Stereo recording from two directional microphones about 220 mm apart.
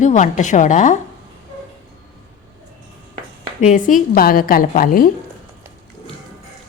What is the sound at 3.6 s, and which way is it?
A woman's voice, 35° left (ahead or behind).